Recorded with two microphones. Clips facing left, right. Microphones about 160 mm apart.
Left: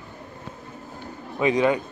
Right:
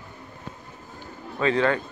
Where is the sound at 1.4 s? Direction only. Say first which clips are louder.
Left 2 dB; 15° left (ahead or behind).